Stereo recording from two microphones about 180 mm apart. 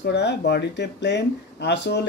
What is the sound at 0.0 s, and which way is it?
Speech, 65° left (ahead or behind).